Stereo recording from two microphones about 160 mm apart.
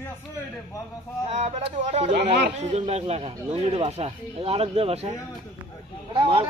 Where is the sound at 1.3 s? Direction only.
45° right (ahead or behind).